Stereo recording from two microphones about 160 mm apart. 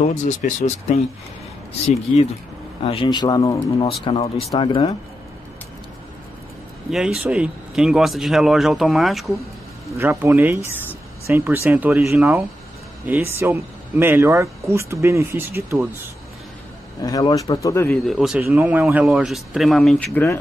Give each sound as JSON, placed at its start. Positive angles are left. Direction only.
{"t": 0.1, "sound": "speech", "side_deg": 50}
{"t": 2.8, "sound": "speech", "side_deg": 40}
{"t": 3.1, "sound": "speech", "side_deg": 25}
{"t": 3.8, "sound": "speech", "side_deg": 35}
{"t": 6.9, "sound": "speech", "side_deg": -5}
{"t": 9.9, "sound": "speech", "side_deg": -15}
{"t": 17.0, "sound": "speech", "side_deg": 25}
{"t": 17.9, "sound": "speech", "side_deg": 0}